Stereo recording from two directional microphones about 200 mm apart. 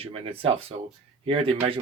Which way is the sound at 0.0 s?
25° right (ahead or behind).